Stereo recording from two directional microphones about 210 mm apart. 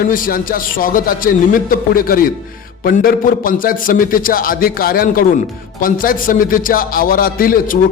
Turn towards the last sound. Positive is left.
turn(degrees=45)  # may be behind; listen again after turning